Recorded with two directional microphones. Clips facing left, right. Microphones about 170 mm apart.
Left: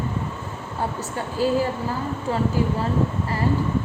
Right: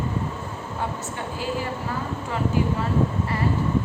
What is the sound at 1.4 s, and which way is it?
Speech, 35° left (ahead or behind).